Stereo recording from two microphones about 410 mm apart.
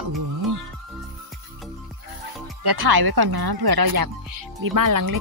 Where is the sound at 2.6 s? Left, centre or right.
Right.